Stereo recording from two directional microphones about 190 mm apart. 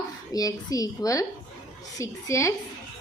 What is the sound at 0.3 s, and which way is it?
A woman's voice, 20° left (ahead or behind).